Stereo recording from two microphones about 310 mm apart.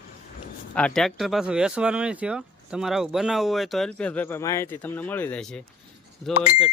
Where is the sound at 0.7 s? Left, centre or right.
Centre.